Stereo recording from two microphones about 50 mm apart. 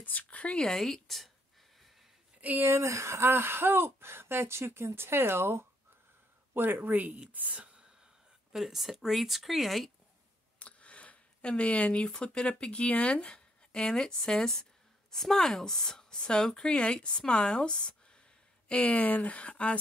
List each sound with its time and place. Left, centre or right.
0.0 s speech: left
0.7 s speech: centre
2.6 s speech: right
6.5 s speech: right
8.5 s speech: centre
10.6 s a woman's voice: left